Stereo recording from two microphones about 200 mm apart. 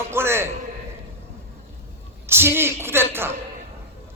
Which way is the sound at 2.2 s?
10° right (ahead or behind).